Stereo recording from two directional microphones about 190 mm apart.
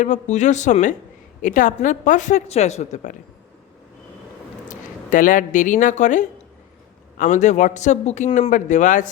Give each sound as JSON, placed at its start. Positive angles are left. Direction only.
{"t": 0.0, "sound": "speech", "side_deg": 40}
{"t": 4.7, "sound": "speech", "side_deg": 45}